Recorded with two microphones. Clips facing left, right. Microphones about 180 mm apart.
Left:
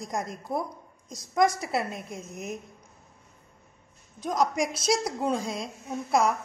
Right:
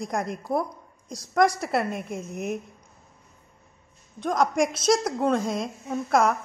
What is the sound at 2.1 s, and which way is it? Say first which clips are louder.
Speech: right 6 dB; 55° right (ahead or behind).